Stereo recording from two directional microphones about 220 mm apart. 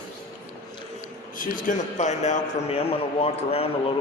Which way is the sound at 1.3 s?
35° left (ahead or behind).